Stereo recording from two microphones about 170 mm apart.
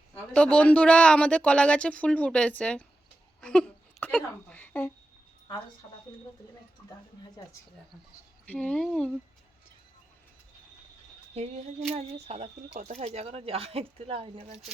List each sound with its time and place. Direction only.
0.1 s a man's voice: 5° left (ahead or behind)
3.4 s a sound: 5° left (ahead or behind)
4.4 s a man's voice: 10° left (ahead or behind)
8.4 s speech: 5° left (ahead or behind)
11.9 s speech: 40° right (ahead or behind)